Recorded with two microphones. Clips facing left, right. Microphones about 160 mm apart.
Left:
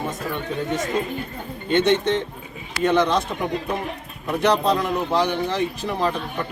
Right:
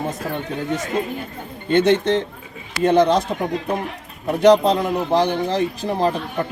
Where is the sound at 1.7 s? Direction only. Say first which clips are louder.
Right 3 dB; 40° right (ahead or behind).